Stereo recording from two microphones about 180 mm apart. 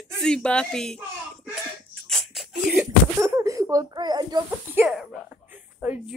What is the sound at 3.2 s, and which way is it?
A child's voice, 15° right (ahead or behind).